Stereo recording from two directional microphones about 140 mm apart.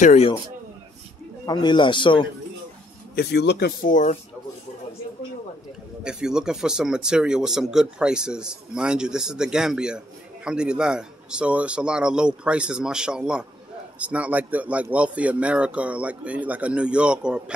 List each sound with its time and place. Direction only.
0.0 s speech: 55° left (ahead or behind)
1.4 s a man's voice: 30° left (ahead or behind)
3.8 s speech: 60° left (ahead or behind)
6.0 s a man's voice: 5° right (ahead or behind)